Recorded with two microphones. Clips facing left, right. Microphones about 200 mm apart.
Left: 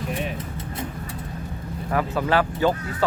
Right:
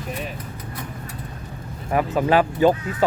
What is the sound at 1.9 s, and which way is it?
Speech, 15° right (ahead or behind).